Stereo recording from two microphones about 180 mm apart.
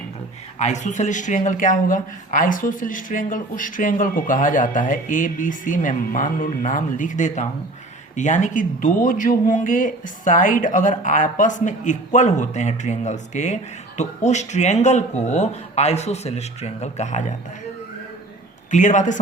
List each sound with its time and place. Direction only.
0.6 s speech: 40° left (ahead or behind)
18.7 s speech: 45° left (ahead or behind)